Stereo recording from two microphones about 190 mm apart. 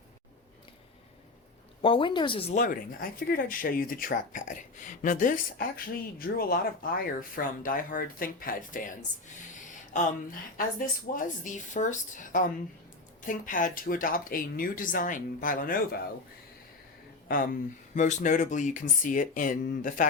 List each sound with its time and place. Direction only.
1.8 s speech: 25° left (ahead or behind)
2.6 s speech: 45° left (ahead or behind)
10.8 s speech: 45° left (ahead or behind)
17.2 s speech: 45° left (ahead or behind)